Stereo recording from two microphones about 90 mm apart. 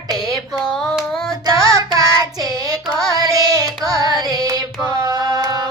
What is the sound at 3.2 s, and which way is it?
Carnatic music, 45° right (ahead or behind).